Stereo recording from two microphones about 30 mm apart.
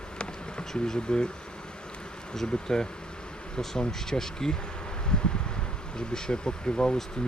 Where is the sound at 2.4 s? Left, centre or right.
Left.